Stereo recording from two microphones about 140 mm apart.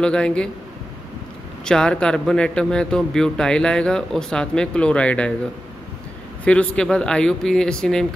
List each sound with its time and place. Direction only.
0.0 s a man's voice: 5° left (ahead or behind)
1.6 s a man's voice: 5° left (ahead or behind)
6.4 s a man's voice: 10° left (ahead or behind)